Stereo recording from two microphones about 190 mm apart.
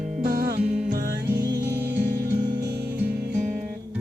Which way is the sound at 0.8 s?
50° right (ahead or behind).